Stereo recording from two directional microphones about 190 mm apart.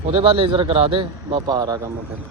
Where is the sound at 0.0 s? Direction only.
30° right (ahead or behind).